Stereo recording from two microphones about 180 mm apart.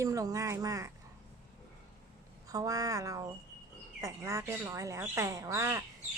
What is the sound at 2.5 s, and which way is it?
Speech, 20° right (ahead or behind).